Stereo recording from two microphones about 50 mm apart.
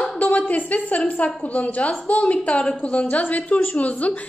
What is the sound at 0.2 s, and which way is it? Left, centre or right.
A woman's voice, left.